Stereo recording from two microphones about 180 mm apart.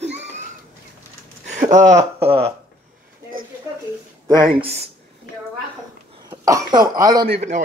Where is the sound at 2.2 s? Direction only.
35° right (ahead or behind).